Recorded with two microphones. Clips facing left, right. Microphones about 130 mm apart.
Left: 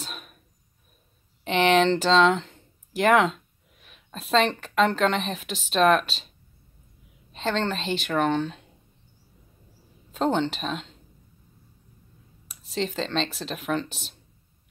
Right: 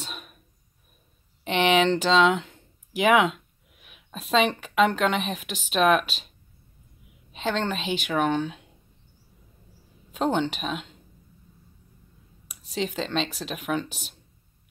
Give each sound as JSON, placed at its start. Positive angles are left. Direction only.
{"t": 0.0, "sound": "a sound", "side_deg": 0}
{"t": 1.4, "sound": "speech", "side_deg": 0}
{"t": 7.3, "sound": "speech", "side_deg": -5}
{"t": 10.1, "sound": "speech", "side_deg": -5}
{"t": 12.4, "sound": "speech", "side_deg": -5}